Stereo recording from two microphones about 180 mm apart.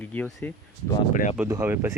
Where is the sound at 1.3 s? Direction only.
15° right (ahead or behind).